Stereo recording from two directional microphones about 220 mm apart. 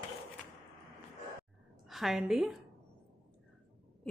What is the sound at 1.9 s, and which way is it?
Speech, centre (ahead or behind).